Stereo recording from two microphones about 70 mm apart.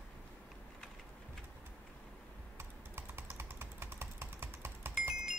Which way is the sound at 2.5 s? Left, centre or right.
Right.